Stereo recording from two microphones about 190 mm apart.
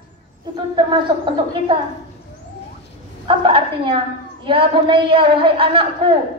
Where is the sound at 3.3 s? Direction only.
30° right (ahead or behind).